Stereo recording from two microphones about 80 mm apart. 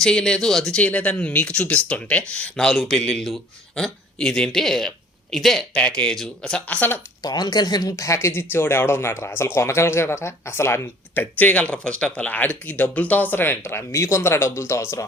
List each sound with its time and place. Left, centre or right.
0.0 s speech: centre
0.8 s speech: centre
5.7 s speech: centre
7.2 s speech: left
8.3 s speech: left